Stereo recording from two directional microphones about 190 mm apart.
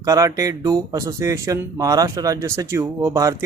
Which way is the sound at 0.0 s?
15° right (ahead or behind).